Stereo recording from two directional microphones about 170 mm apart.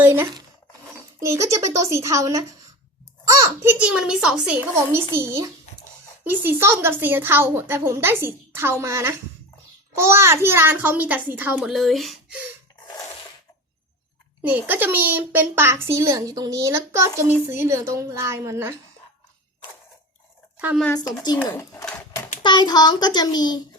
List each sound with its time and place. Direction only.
0.0 s speech: 15° right (ahead or behind)
14.4 s speech: 10° right (ahead or behind)
20.9 s child singing: 25° left (ahead or behind)
21.3 s speech: 15° left (ahead or behind)
22.4 s child singing: 25° left (ahead or behind)